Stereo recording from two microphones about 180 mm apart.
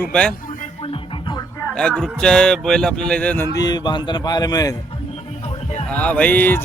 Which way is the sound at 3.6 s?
20° left (ahead or behind).